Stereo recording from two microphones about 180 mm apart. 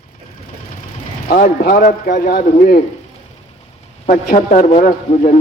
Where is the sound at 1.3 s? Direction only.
50° left (ahead or behind).